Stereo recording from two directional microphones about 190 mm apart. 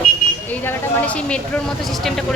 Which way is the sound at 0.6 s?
10° left (ahead or behind).